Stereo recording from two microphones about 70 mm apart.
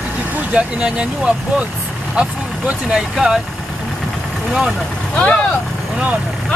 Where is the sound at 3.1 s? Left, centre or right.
Centre.